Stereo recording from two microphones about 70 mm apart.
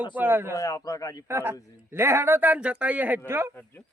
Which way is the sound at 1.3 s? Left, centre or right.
Right.